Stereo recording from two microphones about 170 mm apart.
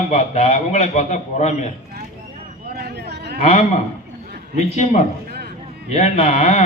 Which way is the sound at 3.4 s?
40° left (ahead or behind).